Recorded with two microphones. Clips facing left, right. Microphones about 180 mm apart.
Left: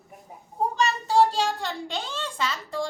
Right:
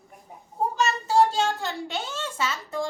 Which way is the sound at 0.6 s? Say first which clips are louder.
Even; centre (ahead or behind).